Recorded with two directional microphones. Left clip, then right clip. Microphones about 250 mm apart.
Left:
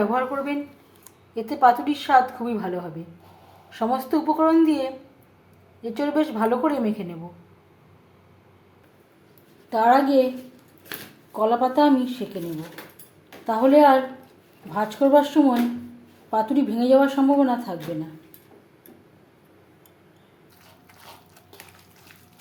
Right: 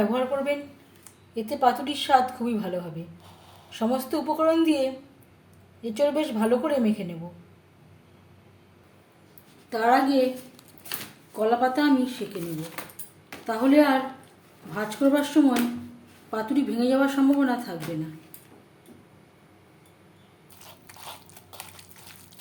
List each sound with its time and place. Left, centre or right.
0.0 s speech: centre
9.6 s speech: centre
11.4 s speech: centre
13.4 s speech: centre